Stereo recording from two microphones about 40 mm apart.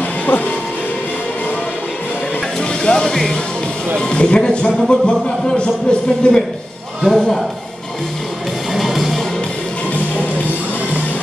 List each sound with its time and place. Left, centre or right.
2.8 s music: centre
4.0 s speech: left
7.1 s a man's voice: centre
8.7 s music: centre